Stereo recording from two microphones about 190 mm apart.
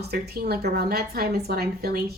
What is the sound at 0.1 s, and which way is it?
A woman's voice, 55° right (ahead or behind).